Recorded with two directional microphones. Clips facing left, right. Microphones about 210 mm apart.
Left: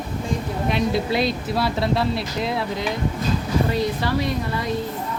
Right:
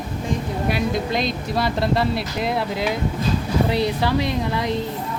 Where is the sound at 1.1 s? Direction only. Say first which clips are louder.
Left 1 dB; 5° left (ahead or behind).